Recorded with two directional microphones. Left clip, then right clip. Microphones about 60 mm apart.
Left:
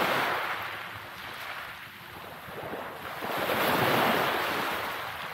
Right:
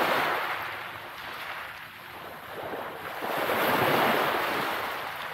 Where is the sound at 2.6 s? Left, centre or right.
Right.